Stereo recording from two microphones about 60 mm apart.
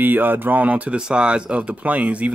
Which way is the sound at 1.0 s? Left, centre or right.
Centre.